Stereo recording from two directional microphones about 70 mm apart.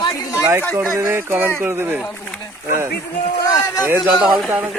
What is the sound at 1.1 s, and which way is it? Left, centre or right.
Speech, right.